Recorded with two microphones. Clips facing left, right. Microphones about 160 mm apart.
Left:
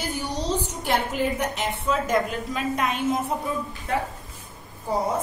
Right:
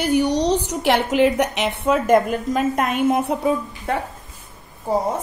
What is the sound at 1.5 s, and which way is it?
A woman's voice, 70° right (ahead or behind).